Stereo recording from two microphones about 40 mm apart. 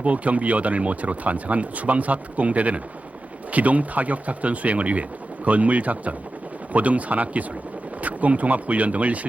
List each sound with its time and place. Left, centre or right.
0.0 s speech: right